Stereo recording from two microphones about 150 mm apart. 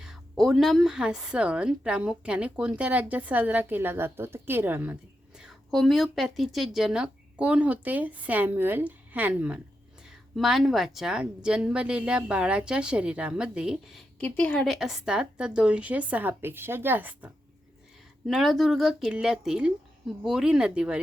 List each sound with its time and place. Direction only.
0.0 s a woman's voice: centre (ahead or behind)
5.4 s a woman's voice: centre (ahead or behind)
14.2 s a woman's voice: 10° left (ahead or behind); by 17.3 s 10° right (ahead or behind)
18.3 s speech: centre (ahead or behind)